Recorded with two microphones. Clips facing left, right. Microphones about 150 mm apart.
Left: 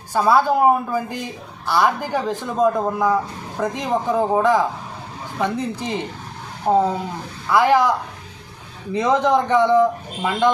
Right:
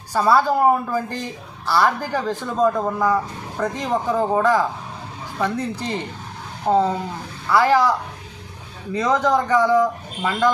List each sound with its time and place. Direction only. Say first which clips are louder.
0.1 s a woman's voice: left 1 dB; 10° left (ahead or behind)
2.6 s a woman's voice: left 1 dB; 5° left (ahead or behind); by 10.5 s 25° left (ahead or behind)